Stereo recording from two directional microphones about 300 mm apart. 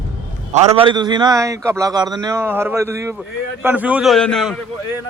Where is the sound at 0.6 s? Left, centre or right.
Centre.